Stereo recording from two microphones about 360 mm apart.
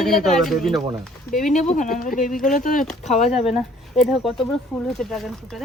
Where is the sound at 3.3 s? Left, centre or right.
Centre.